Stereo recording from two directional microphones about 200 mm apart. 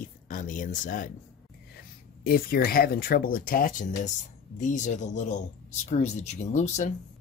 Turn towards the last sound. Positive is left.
turn(degrees=35)  # may be behind; listen again after turning